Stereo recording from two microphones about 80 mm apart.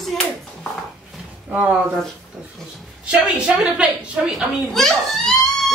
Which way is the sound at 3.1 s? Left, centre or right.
Centre.